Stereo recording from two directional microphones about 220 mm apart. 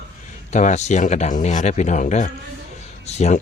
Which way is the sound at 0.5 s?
35° left (ahead or behind).